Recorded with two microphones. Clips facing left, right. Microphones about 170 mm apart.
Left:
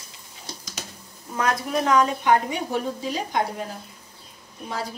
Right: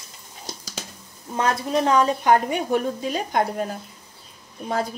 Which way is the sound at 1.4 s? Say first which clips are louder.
Right 2 dB; 30° right (ahead or behind).